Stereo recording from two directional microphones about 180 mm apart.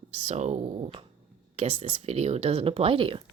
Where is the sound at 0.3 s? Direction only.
40° right (ahead or behind).